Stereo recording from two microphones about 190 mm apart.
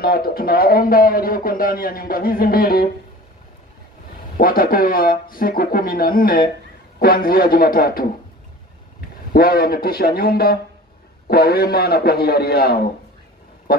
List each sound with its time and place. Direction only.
0.0 s a man's voice: 55° left (ahead or behind)
4.4 s a man's voice: 50° left (ahead or behind)
9.3 s a man's voice: 50° left (ahead or behind)
13.7 s a sound: 50° left (ahead or behind)